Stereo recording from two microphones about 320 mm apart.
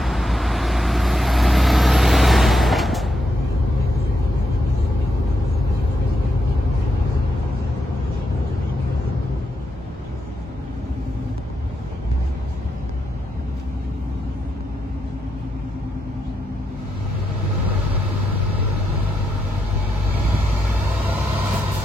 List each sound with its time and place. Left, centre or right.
0.0 s vehicle: centre